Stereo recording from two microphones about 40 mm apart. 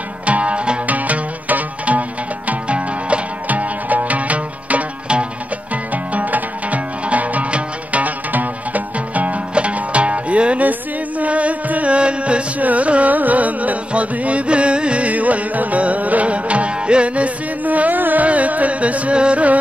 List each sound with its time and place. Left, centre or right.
0.3 s music: right
12.6 s carnatic music: right